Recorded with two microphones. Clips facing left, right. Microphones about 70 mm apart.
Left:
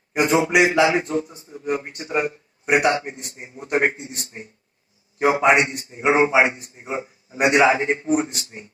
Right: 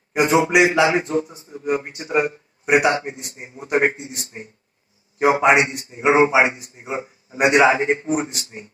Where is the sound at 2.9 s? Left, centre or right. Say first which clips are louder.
Right 1 dB; right.